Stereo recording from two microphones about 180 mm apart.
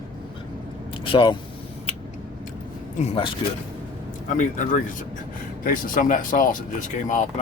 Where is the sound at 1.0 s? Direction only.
30° left (ahead or behind).